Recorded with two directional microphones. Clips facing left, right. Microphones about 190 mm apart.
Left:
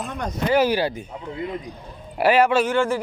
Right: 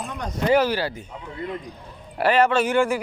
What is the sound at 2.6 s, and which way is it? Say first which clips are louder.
Speech: even; 15° right (ahead or behind).